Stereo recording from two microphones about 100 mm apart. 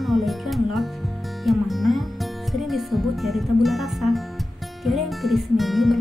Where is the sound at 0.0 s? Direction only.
Centre (ahead or behind).